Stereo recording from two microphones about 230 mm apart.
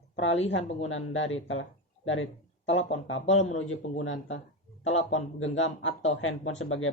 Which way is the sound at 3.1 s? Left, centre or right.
Left.